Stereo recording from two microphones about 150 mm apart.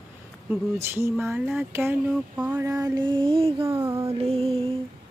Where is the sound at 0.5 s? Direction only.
15° right (ahead or behind).